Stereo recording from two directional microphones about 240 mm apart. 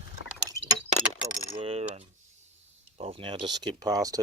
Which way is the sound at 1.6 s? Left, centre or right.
Right.